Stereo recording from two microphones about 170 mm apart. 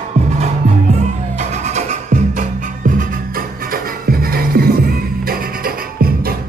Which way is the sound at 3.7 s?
60° right (ahead or behind).